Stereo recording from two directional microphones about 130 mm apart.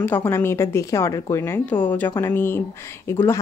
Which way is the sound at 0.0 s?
15° left (ahead or behind).